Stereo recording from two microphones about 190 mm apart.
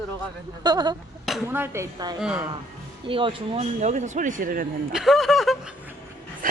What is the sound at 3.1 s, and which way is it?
Speech, 30° right (ahead or behind).